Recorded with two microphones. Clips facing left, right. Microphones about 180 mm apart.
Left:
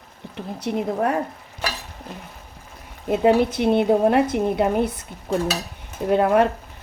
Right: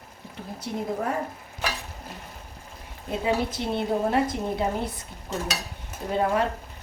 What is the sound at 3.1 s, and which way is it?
A woman's voice, 65° left (ahead or behind).